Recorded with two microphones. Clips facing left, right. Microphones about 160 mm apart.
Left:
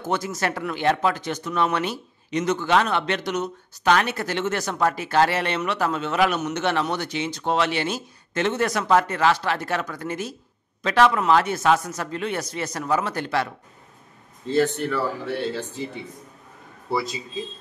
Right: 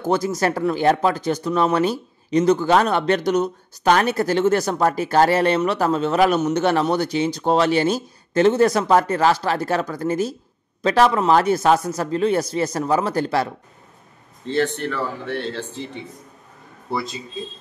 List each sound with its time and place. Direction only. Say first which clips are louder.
0.0 s speech: right 6 dB; 35° right (ahead or behind)
14.5 s a man's voice: even; 5° left (ahead or behind)